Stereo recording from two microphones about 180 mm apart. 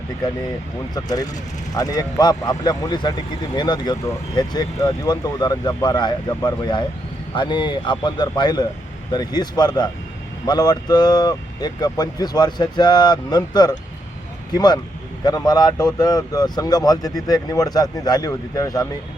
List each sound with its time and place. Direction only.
0.9 s speech: 20° left (ahead or behind)